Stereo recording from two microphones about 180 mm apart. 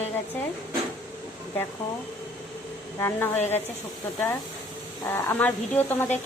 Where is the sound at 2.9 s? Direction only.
15° left (ahead or behind).